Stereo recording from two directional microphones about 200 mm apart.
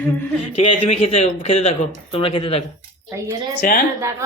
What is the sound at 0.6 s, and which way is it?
Speech, 30° left (ahead or behind).